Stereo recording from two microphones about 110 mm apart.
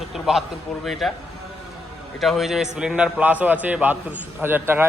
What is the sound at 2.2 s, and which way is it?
A man's voice, centre (ahead or behind).